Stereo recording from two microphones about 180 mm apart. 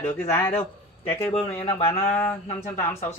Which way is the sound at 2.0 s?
10° left (ahead or behind).